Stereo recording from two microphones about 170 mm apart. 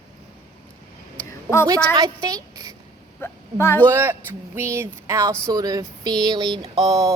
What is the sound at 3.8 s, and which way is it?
A woman's voice, 15° right (ahead or behind).